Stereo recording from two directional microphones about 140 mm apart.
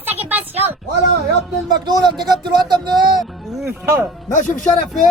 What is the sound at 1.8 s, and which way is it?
Speech, 30° right (ahead or behind).